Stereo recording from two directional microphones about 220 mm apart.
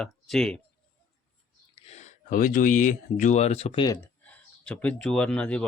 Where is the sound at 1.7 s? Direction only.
25° left (ahead or behind).